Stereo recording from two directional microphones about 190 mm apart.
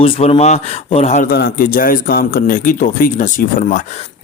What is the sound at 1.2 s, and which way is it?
A man's voice, 50° left (ahead or behind).